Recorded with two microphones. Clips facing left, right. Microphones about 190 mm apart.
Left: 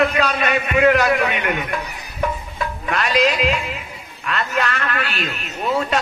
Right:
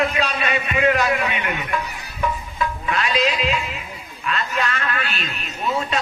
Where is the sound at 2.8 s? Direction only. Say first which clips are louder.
Left 4 dB; 50° left (ahead or behind).